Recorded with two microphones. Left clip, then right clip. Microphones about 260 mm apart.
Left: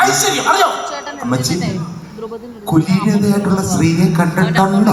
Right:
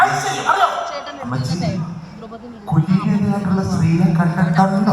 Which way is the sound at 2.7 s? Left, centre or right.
Left.